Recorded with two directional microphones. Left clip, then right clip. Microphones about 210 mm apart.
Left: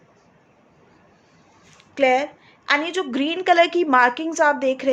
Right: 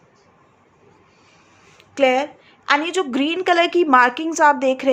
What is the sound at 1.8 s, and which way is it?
A woman's voice, 10° right (ahead or behind).